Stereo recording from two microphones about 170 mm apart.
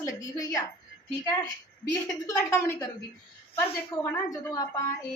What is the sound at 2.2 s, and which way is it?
Speech, 15° left (ahead or behind).